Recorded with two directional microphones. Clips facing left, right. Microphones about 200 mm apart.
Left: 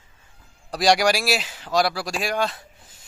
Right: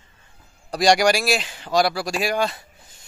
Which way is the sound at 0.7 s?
Centre (ahead or behind).